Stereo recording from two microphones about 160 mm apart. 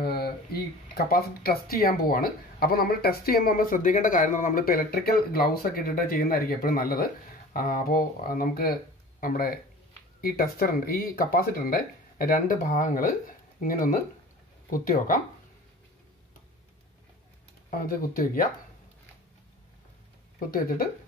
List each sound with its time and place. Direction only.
0.0 s speech: 80° left; by 15.1 s 60° left (ahead or behind)
17.6 s speech: 60° left (ahead or behind)
20.3 s speech: 65° left (ahead or behind)